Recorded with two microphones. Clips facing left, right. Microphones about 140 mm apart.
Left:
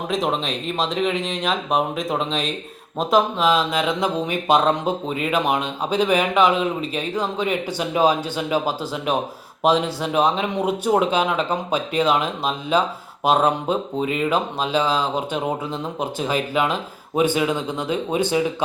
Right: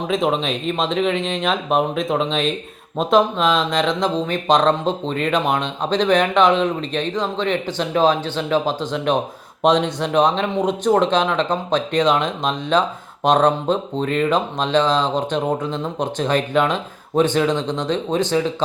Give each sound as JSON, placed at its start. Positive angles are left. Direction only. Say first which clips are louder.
{"t": 0.1, "sound": "speech", "louder": "right 3 dB", "side_deg": 0}